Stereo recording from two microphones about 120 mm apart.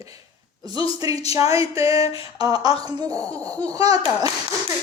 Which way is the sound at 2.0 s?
60° left (ahead or behind).